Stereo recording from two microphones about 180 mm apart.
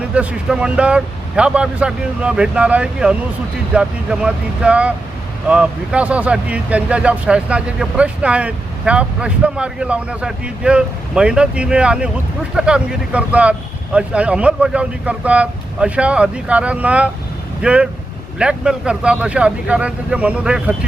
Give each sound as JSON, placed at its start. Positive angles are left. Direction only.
{"t": 0.1, "sound": "speech", "side_deg": -5}